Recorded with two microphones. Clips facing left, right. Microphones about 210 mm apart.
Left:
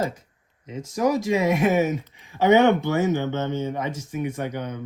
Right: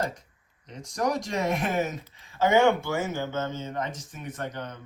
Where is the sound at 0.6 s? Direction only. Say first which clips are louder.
Left 6 dB; 5° left (ahead or behind).